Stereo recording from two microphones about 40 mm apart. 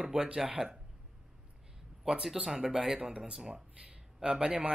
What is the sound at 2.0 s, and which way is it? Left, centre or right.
Speech, centre.